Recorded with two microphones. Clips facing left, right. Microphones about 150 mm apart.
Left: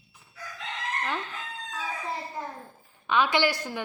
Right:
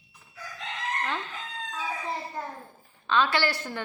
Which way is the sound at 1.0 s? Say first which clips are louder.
Left 2 dB; 10° left (ahead or behind).